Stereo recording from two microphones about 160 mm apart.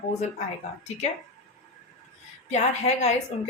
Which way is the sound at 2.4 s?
45° left (ahead or behind).